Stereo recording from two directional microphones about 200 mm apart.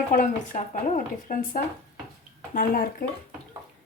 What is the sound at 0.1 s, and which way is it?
A woman's voice, 40° left (ahead or behind).